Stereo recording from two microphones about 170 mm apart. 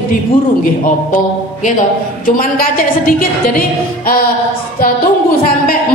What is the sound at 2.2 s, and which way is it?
A woman's voice, 55° left (ahead or behind).